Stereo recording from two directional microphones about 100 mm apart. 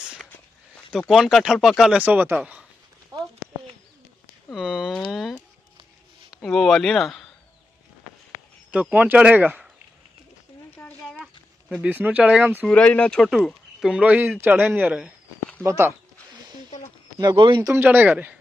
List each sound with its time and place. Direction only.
0.9 s speech: 5° right (ahead or behind)
2.0 s speech: 15° right (ahead or behind)
3.1 s a sound: 40° right (ahead or behind)
4.5 s speech: 5° right (ahead or behind)
6.3 s speech: centre (ahead or behind)
8.9 s speech: 15° right (ahead or behind)
10.8 s a sound: 20° left (ahead or behind)
11.8 s speech: 15° right (ahead or behind)
12.6 s speech: 10° left (ahead or behind)
13.8 s speech: 10° right (ahead or behind)
15.6 s speech: 30° right (ahead or behind)
17.2 s speech: 50° right (ahead or behind)
17.6 s speech: 25° right (ahead or behind)